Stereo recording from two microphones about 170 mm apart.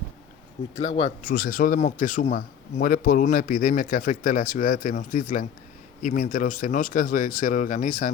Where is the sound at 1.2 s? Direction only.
55° left (ahead or behind).